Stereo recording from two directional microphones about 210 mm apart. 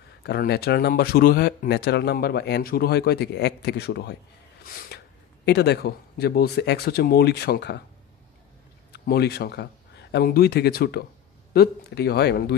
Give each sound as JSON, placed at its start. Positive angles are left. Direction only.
{"t": 0.2, "sound": "a man's voice", "side_deg": 50}
{"t": 8.9, "sound": "speech", "side_deg": 50}